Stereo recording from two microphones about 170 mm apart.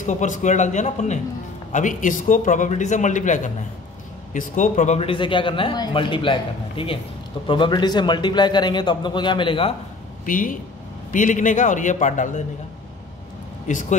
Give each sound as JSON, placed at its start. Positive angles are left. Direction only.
{"t": 0.0, "sound": "a man's voice", "side_deg": 45}
{"t": 10.2, "sound": "a man's voice", "side_deg": 50}
{"t": 13.7, "sound": "a man's voice", "side_deg": 45}